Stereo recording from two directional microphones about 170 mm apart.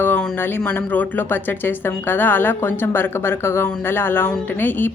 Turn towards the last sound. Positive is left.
turn(degrees=10)  # may be behind; listen again after turning